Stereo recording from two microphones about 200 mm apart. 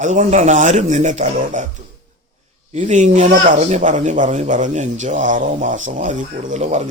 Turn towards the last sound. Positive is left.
turn(degrees=-35)  # may be behind; listen again after turning